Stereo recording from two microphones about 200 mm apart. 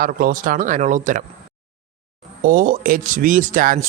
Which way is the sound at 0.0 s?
45° right (ahead or behind).